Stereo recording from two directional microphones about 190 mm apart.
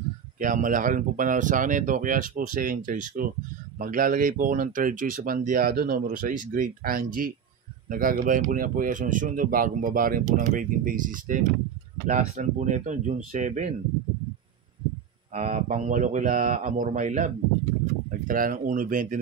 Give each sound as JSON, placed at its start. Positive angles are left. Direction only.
{"t": 0.4, "sound": "speech", "side_deg": -45}
{"t": 15.3, "sound": "speech", "side_deg": -40}